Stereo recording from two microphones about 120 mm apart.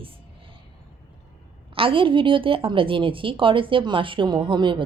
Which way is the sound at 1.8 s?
45° right (ahead or behind).